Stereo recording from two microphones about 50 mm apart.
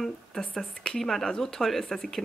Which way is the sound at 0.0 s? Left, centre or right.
Centre.